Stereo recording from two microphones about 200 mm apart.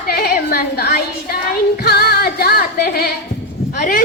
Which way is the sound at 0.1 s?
50° left (ahead or behind).